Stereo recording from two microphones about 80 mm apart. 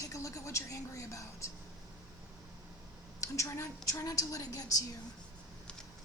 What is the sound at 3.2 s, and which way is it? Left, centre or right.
Speech, left.